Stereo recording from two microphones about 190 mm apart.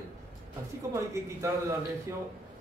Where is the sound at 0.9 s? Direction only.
15° right (ahead or behind).